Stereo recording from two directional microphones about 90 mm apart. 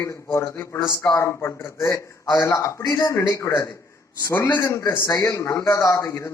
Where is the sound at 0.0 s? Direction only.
30° left (ahead or behind).